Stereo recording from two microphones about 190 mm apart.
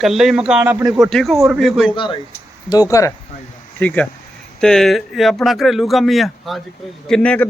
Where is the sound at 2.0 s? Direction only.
25° left (ahead or behind).